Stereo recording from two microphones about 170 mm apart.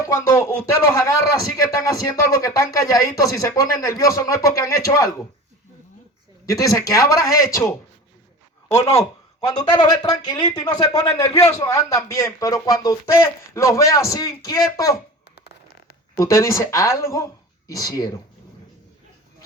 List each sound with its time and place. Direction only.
0.1 s speech: 15° left (ahead or behind)
2.4 s speech: 20° left (ahead or behind)
6.4 s speech: 20° left (ahead or behind)
8.7 s speech: 20° left (ahead or behind)
15.4 s a sound: 75° left (ahead or behind)
16.1 s speech: 15° left (ahead or behind)